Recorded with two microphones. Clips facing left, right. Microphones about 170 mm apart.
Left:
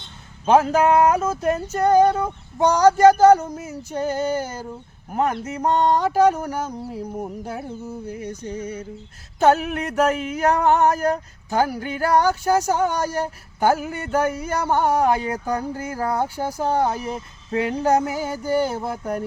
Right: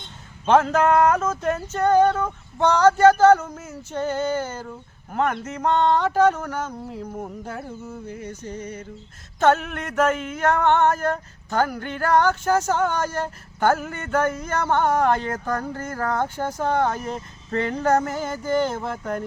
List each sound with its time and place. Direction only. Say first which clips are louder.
0.4 s speech: left 1 dB; 10° left (ahead or behind)
9.4 s a sound: left 2 dB; 35° left (ahead or behind)
11.4 s speech: left 2 dB; 10° left (ahead or behind)